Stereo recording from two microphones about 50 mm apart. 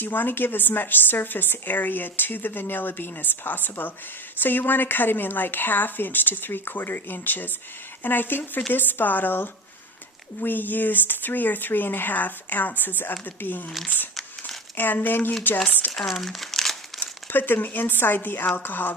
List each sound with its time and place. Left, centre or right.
0.0 s speech: left
15.9 s speech: centre
17.0 s speech: left